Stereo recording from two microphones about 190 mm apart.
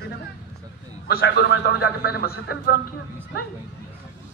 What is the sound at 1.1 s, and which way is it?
A man's voice, 60° left (ahead or behind).